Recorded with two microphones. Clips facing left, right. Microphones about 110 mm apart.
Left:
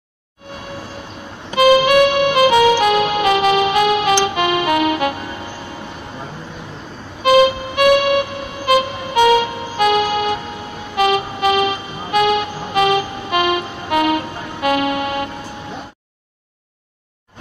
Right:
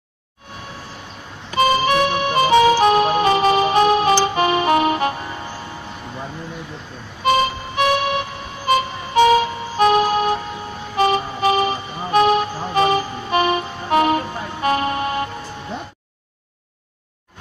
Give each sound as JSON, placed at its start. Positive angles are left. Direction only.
{"t": 1.6, "sound": "music", "side_deg": -35}
{"t": 7.3, "sound": "music", "side_deg": -35}